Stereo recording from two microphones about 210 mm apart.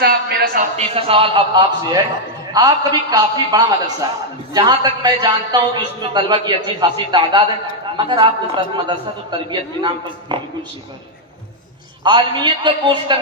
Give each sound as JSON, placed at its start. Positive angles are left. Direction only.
{"t": 0.0, "sound": "a man's voice", "side_deg": -50}
{"t": 0.7, "sound": "a man's voice", "side_deg": -25}
{"t": 12.0, "sound": "a man's voice", "side_deg": -20}